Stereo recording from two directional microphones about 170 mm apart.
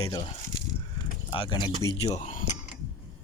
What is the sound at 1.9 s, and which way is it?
Speech, 40° left (ahead or behind).